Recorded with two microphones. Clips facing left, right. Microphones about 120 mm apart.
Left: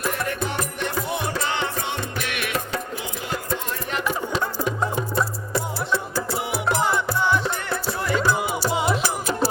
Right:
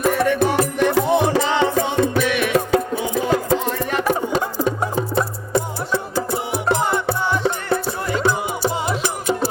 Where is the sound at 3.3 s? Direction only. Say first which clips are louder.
Right 6 dB; 85° right.